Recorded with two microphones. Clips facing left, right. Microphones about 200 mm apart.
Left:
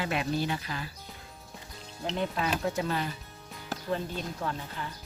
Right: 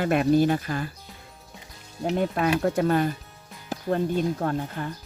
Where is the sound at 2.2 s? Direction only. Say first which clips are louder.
Right 6 dB; 55° right (ahead or behind).